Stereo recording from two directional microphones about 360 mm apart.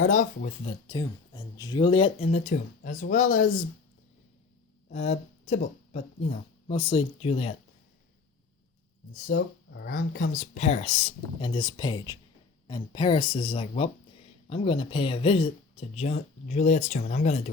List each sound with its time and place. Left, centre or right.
0.0 s speech: left
4.9 s speech: centre
9.2 s speech: left